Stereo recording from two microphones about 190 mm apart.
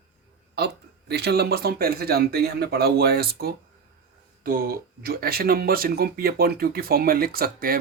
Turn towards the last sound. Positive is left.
turn(degrees=-50)  # may be behind; listen again after turning